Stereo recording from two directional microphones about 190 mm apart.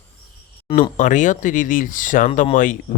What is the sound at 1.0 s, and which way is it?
Speech, 40° left (ahead or behind).